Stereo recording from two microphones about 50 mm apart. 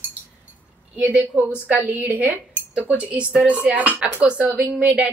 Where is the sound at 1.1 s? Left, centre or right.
Right.